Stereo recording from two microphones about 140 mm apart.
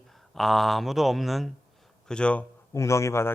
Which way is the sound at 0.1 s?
Centre (ahead or behind).